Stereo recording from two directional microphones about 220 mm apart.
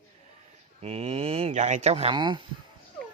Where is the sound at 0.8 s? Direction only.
25° right (ahead or behind).